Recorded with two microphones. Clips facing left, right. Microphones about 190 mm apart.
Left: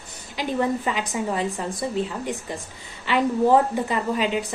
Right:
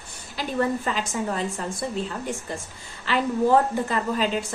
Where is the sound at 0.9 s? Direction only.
10° left (ahead or behind).